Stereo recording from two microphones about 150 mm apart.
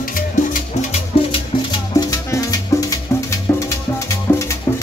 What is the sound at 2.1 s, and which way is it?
Music, 25° left (ahead or behind).